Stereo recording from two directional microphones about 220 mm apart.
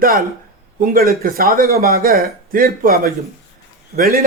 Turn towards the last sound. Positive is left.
turn(degrees=-40)  # may be behind; listen again after turning